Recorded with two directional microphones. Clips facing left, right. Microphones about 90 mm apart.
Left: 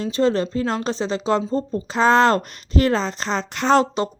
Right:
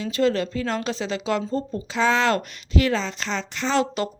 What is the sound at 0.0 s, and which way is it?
A woman's voice, 30° left (ahead or behind).